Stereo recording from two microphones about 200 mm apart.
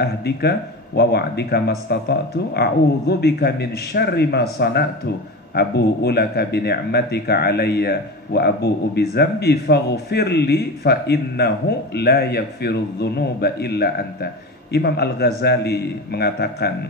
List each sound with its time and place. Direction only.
0.0 s speech: 55° left (ahead or behind)